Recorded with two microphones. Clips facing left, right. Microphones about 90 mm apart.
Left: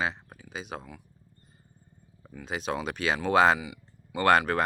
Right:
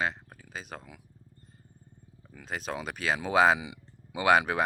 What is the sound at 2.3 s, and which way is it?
Speech, centre (ahead or behind).